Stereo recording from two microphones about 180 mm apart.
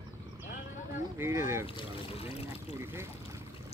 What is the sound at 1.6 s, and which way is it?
Speech, 30° left (ahead or behind).